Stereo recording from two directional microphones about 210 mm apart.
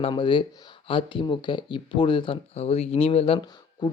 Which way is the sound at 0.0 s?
25° left (ahead or behind).